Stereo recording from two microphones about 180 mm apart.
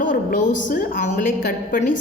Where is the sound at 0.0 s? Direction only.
45° left (ahead or behind).